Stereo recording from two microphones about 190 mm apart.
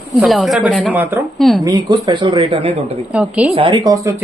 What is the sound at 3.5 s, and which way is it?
Speech, 25° right (ahead or behind).